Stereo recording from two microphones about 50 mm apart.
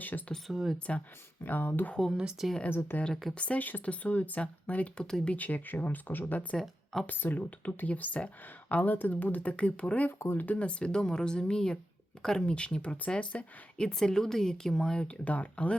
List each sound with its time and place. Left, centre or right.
0.4 s speech: centre
1.5 s speech: left
2.1 s speech: centre
2.6 s speech: left
3.3 s speech: left
4.9 s speech: centre
5.4 s speech: left
6.6 s speech: centre
7.1 s speech: left
13.8 s speech: centre
15.2 s speech: left